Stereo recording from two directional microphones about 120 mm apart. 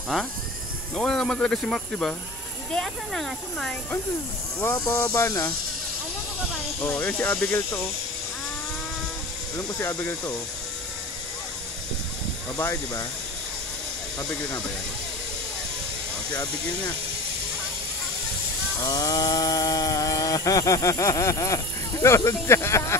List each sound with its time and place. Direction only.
0.9 s speech: 5° left (ahead or behind)
4.8 s speech: 20° left (ahead or behind)
7.0 s speech: 15° left (ahead or behind)
9.6 s speech: 30° left (ahead or behind)
12.5 s speech: 20° left (ahead or behind)
18.8 s chainsaw: 30° left (ahead or behind)
22.0 s speech: 25° left (ahead or behind)